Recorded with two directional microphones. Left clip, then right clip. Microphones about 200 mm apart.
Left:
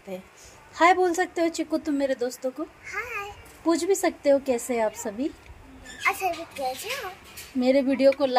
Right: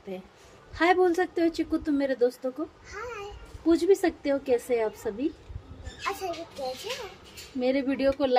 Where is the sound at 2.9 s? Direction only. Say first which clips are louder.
Left 5 dB; 20° right (ahead or behind).